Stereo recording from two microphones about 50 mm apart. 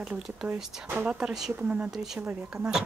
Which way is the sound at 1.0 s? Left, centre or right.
Right.